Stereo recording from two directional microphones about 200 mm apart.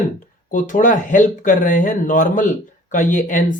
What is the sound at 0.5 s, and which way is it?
Speech, 40° left (ahead or behind).